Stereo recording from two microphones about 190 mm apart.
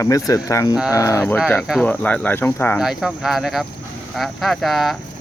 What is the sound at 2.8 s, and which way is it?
Speech, centre (ahead or behind).